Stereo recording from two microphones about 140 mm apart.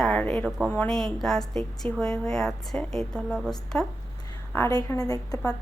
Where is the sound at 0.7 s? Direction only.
10° left (ahead or behind).